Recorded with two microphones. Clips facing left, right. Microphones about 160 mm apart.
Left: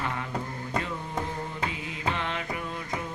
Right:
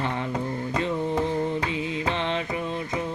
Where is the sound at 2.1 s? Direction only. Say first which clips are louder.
Right 5 dB; 25° right (ahead or behind).